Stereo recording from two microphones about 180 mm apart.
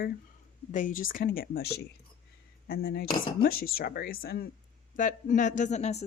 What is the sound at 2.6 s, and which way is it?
Speech, 55° left (ahead or behind).